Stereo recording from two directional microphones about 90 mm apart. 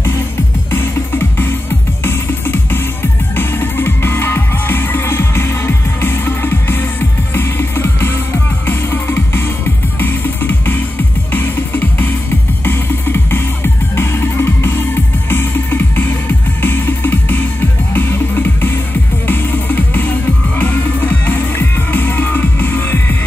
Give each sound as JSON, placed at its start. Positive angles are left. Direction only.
{"t": 0.7, "sound": "music", "side_deg": 25}